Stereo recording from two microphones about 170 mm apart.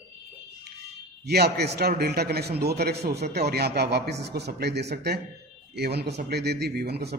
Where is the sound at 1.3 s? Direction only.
70° right (ahead or behind).